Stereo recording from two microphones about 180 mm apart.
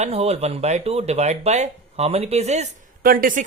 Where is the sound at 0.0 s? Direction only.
35° right (ahead or behind).